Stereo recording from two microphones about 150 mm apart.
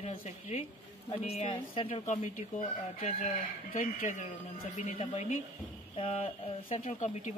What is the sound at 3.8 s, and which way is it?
Speech, 55° left (ahead or behind).